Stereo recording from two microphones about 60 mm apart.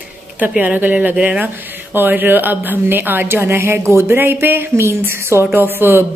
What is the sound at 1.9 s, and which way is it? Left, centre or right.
Speech, right.